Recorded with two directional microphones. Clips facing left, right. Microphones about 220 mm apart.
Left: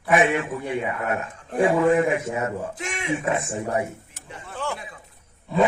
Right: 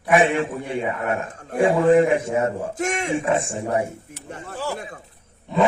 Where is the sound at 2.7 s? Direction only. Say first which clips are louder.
Right 8 dB; 45° right (ahead or behind).